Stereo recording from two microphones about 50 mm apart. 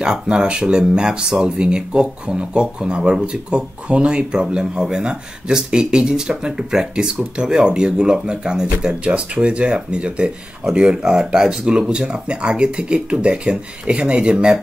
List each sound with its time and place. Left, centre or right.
0.0 s speech: centre